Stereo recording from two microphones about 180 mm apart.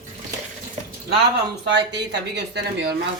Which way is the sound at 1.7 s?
70° right (ahead or behind).